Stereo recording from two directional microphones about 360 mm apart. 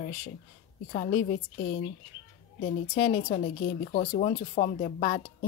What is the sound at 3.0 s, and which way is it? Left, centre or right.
Speech, left.